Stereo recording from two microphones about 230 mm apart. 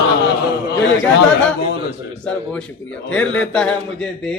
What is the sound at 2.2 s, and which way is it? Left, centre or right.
A man's voice, centre.